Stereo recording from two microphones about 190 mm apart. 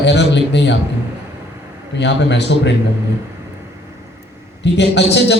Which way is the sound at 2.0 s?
65° left (ahead or behind).